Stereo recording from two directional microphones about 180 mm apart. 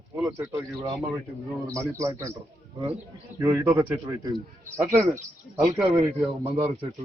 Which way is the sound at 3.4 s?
15° right (ahead or behind).